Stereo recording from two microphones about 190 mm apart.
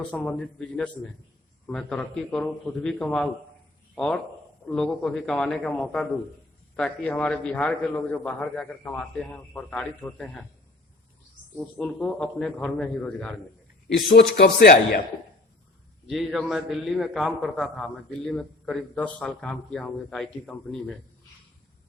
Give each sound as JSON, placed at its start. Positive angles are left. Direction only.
{"t": 0.1, "sound": "a man's voice", "side_deg": 5}
{"t": 11.5, "sound": "a man's voice", "side_deg": 5}
{"t": 13.8, "sound": "a man's voice", "side_deg": 55}
{"t": 16.0, "sound": "a man's voice", "side_deg": 0}